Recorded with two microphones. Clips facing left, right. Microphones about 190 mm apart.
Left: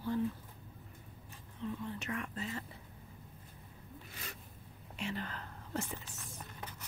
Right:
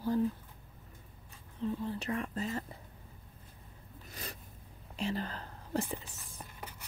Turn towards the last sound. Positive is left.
turn(degrees=-35)  # may be behind; listen again after turning